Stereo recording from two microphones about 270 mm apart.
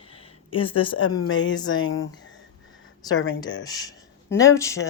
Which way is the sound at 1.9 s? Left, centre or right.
Left.